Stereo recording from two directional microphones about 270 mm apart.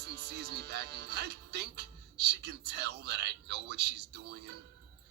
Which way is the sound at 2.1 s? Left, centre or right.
Right.